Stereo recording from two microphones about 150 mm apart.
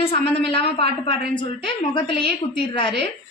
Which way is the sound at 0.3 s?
40° left (ahead or behind).